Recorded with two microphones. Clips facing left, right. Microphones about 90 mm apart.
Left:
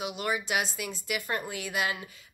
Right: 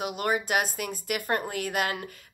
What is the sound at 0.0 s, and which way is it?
Speech, 45° right (ahead or behind).